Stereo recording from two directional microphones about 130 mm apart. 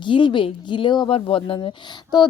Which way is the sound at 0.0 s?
40° left (ahead or behind).